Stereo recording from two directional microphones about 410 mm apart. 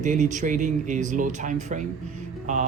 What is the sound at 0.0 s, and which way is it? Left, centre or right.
Speech, centre.